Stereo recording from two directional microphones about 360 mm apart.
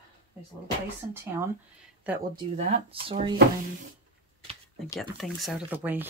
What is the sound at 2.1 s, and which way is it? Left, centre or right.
Speech, centre.